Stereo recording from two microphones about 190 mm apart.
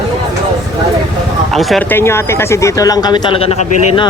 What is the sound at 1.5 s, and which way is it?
Speech, centre (ahead or behind).